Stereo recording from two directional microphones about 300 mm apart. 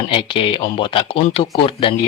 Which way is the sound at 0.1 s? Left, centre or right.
Centre.